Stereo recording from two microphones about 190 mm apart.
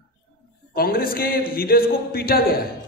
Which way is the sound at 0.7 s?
50° left (ahead or behind).